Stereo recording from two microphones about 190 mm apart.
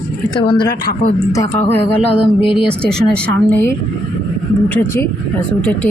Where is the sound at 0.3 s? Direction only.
25° left (ahead or behind).